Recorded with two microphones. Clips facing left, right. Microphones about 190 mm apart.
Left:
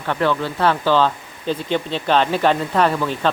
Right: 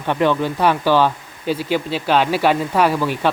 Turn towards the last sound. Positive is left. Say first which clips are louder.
# right 1 dB
turn(degrees=-10)  # may be behind; listen again after turning